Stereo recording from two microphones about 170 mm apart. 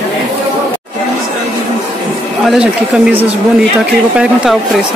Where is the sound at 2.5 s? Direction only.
5° right (ahead or behind).